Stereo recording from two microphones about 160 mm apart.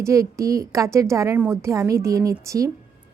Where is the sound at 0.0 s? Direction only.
20° right (ahead or behind).